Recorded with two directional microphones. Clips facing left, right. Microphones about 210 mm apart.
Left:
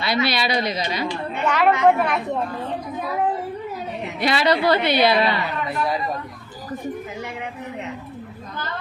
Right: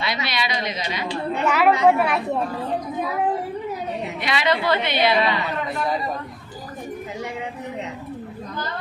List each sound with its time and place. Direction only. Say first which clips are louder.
0.0 s a woman's voice: left 4 dB; 35° left (ahead or behind)
1.5 s a woman's voice: even; 5° right (ahead or behind)
4.2 s a woman's voice: left 4 dB; 35° left (ahead or behind)